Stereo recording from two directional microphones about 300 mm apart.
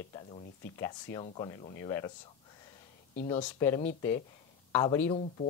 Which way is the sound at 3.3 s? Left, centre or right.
Centre.